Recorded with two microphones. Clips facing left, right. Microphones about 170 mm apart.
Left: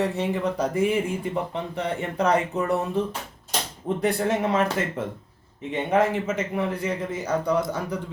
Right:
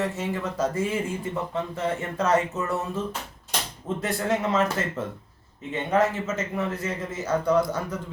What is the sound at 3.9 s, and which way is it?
Speech, 35° left (ahead or behind).